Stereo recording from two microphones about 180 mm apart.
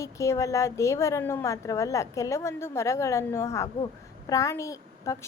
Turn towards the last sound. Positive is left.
turn(degrees=15)  # may be behind; listen again after turning